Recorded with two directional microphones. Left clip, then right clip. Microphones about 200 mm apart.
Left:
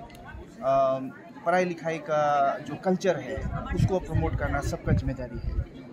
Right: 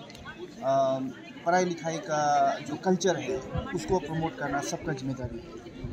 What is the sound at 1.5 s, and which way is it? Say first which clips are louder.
Speech: left 1 dB; 20° left (ahead or behind).